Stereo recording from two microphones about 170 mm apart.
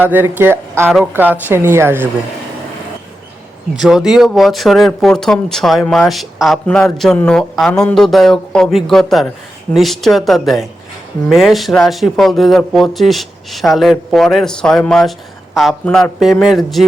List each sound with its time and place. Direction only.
0.0 s a woman's voice: 10° right (ahead or behind)
3.8 s speech: 5° right (ahead or behind)